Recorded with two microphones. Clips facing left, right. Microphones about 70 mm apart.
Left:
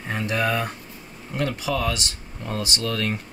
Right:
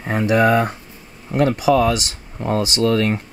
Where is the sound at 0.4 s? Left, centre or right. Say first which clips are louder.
Right 9 dB; right.